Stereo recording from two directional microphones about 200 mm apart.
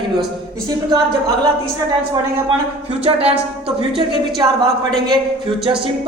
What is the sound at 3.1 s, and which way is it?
Speech, 30° right (ahead or behind).